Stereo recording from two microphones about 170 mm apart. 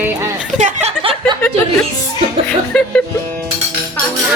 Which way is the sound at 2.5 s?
5° left (ahead or behind).